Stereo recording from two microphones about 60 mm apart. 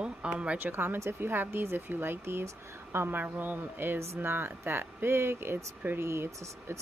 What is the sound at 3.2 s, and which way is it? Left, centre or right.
Speech, right.